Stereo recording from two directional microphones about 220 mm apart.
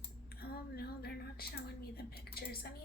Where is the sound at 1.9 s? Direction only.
45° left (ahead or behind).